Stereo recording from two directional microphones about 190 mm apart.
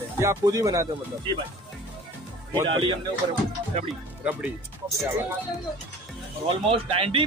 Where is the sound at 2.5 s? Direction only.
25° right (ahead or behind).